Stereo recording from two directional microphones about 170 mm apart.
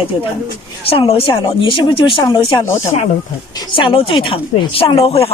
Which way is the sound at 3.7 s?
30° left (ahead or behind).